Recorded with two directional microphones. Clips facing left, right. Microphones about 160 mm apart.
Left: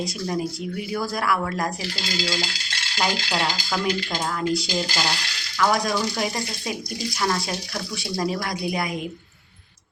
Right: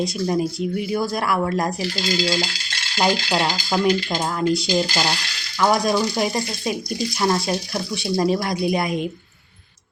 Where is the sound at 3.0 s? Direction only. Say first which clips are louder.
Right 5 dB; 30° right (ahead or behind).